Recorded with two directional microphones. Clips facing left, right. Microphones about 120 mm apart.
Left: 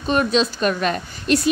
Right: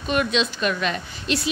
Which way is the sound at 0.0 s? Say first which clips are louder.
Left 4 dB; 35° left (ahead or behind).